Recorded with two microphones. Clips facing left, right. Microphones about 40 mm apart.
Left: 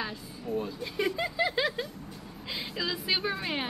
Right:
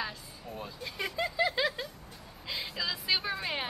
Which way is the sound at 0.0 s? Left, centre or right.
Centre.